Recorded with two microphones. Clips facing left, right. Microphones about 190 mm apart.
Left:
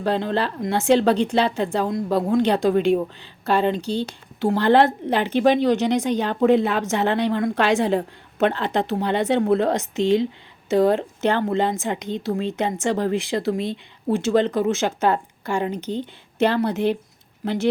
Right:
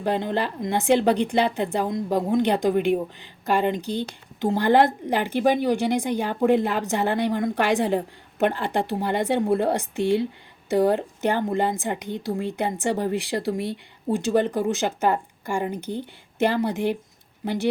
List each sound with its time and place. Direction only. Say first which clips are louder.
0.0 s a woman's voice: left 2 dB; 15° right (ahead or behind)
6.6 s a woman's voice: left 3 dB; 70° left (ahead or behind)
7.0 s a woman's voice: left 2 dB; 15° right (ahead or behind)